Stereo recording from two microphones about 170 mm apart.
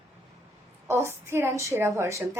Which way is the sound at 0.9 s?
15° right (ahead or behind).